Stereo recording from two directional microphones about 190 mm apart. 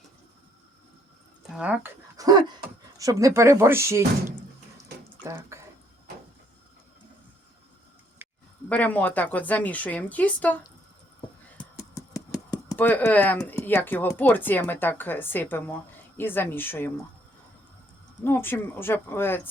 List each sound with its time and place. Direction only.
1.5 s speech: 5° right (ahead or behind)
2.1 s a sound: 20° right (ahead or behind)
3.0 s speech: 15° right (ahead or behind)
5.2 s drip: 15° right (ahead or behind)
8.7 s speech: 10° left (ahead or behind)
18.2 s speech: 10° left (ahead or behind)